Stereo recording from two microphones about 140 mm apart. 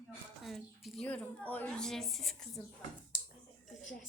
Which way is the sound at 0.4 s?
Centre (ahead or behind).